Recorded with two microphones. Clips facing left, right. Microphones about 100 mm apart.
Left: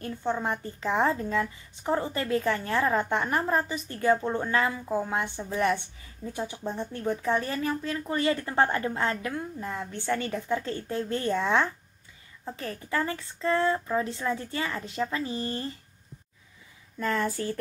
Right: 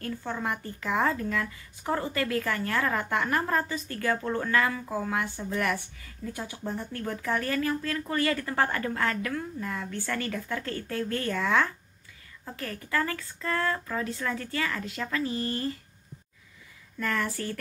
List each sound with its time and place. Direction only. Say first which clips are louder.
0.0 s speech: left 3 dB; 25° left (ahead or behind)
17.0 s speech: left 2 dB; 25° left (ahead or behind)